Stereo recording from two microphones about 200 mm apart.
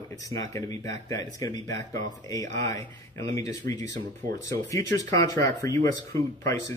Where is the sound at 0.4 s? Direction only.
15° left (ahead or behind).